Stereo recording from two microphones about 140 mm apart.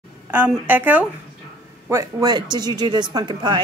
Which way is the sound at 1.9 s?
20° right (ahead or behind).